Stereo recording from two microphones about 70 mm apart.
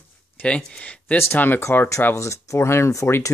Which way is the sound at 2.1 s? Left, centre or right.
Left.